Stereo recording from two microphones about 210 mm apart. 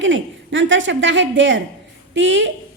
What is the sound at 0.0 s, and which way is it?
A child's voice, 60° right (ahead or behind).